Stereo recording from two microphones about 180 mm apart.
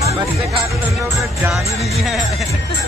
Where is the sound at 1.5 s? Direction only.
Centre (ahead or behind).